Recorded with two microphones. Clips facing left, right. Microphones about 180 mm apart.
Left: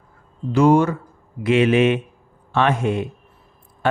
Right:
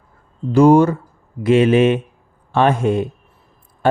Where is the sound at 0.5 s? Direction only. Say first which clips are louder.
Right 4 dB; 35° right (ahead or behind).